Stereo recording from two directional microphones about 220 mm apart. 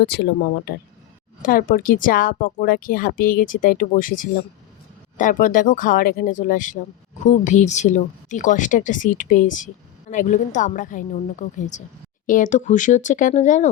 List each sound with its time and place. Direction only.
1.4 s speech: 40° left (ahead or behind)